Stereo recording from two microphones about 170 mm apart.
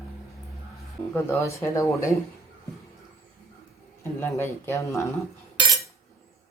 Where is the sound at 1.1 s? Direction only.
15° left (ahead or behind).